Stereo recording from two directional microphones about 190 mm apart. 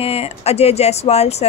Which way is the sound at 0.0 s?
30° left (ahead or behind).